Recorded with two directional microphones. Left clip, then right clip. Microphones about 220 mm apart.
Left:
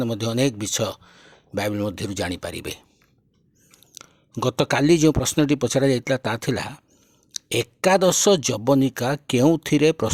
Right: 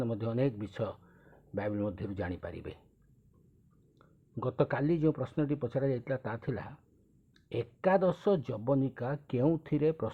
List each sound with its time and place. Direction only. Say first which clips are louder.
0.0 s speech: left 10 dB; 40° left (ahead or behind)
3.9 s speech: left 12 dB; 45° left (ahead or behind)